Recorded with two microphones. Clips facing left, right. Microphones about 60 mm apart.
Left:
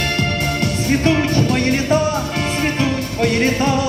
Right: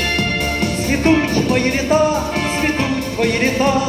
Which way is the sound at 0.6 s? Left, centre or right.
Right.